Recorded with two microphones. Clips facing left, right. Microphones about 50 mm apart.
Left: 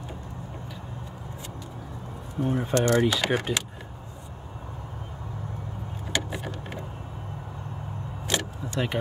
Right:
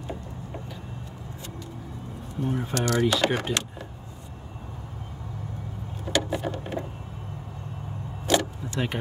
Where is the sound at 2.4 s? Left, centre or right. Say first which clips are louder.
Left 3 dB; centre.